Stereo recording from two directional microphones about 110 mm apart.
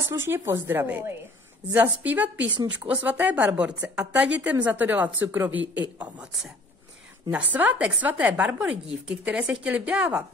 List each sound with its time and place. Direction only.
0.1 s a woman's voice: 20° right (ahead or behind)
7.2 s speech: 10° right (ahead or behind)